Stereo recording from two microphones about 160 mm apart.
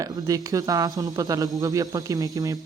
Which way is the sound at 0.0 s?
20° right (ahead or behind).